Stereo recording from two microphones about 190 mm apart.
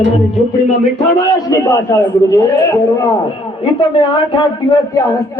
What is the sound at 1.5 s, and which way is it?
Speech, 15° left (ahead or behind).